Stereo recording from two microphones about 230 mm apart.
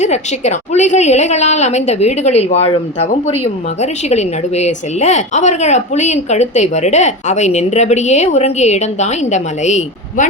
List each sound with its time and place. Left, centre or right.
0.0 s a woman's voice: left